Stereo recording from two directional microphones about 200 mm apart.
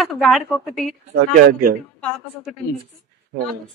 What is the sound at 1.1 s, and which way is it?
Speech, 50° right (ahead or behind).